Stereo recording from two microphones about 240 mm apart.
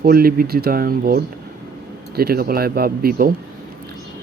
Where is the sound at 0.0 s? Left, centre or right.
Right.